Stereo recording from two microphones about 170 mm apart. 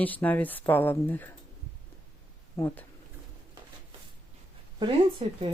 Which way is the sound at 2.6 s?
15° left (ahead or behind).